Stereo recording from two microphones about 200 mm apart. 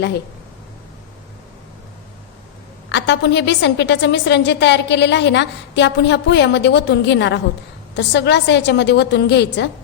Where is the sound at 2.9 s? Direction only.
60° left (ahead or behind).